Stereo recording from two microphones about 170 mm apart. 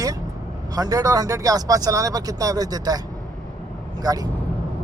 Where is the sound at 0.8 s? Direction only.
20° right (ahead or behind).